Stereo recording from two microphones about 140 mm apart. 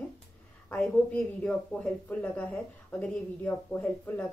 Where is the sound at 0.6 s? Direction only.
10° left (ahead or behind).